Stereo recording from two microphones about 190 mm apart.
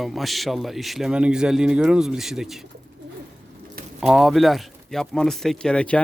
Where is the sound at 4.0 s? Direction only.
Centre (ahead or behind).